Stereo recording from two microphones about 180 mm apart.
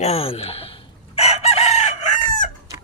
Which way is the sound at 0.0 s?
35° left (ahead or behind).